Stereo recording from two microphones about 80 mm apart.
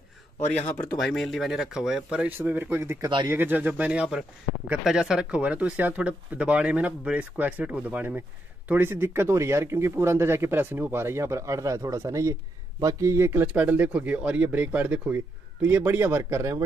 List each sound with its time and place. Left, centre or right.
0.9 s speech: centre
2.3 s speech: right